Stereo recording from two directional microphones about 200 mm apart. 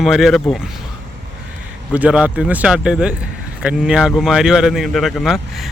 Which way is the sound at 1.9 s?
5° right (ahead or behind).